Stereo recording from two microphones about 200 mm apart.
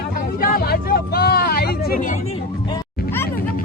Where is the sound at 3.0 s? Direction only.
10° left (ahead or behind).